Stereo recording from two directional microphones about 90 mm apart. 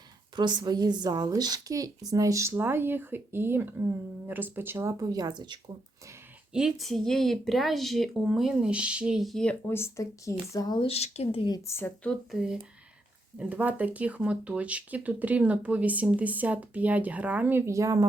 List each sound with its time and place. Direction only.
0.3 s a woman's voice: 55° right (ahead or behind); by 5.0 s 30° right (ahead or behind)
5.0 s a woman's voice: 45° right (ahead or behind)
6.5 s speech: 5° right (ahead or behind)
9.6 s speech: 30° left (ahead or behind)
10.7 s speech: 80° left
12.3 s speech: 10° right (ahead or behind)
13.4 s speech: 20° right (ahead or behind)
17.7 s speech: 35° right (ahead or behind)